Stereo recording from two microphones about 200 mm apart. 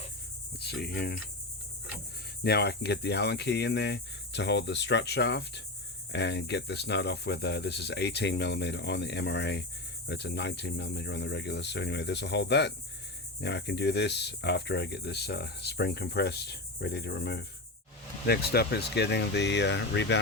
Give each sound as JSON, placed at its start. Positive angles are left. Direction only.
{"t": 0.6, "sound": "speech", "side_deg": 55}
{"t": 2.4, "sound": "speech", "side_deg": 55}